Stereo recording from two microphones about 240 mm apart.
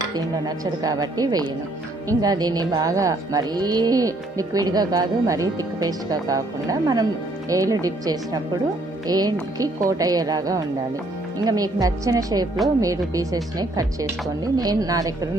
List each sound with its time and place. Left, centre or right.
0.1 s speech: centre